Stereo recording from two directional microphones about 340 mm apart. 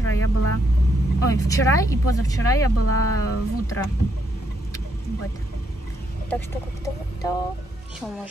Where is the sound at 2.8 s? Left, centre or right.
Left.